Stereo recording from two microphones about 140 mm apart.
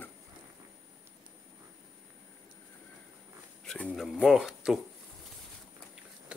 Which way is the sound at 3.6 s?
5° left (ahead or behind).